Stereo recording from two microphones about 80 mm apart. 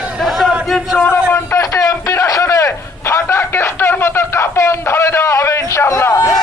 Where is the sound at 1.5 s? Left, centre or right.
Left.